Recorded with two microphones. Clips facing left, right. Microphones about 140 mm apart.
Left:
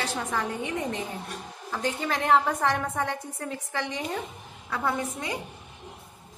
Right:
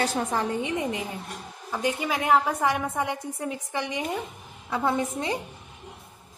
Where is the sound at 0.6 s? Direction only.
15° right (ahead or behind).